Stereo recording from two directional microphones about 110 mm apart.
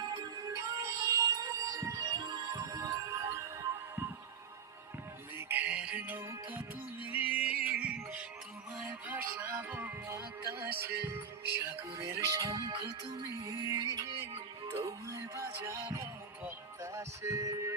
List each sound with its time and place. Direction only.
0.5 s music: 25° right (ahead or behind)
5.4 s music: 15° right (ahead or behind)
12.5 s music: 40° right (ahead or behind)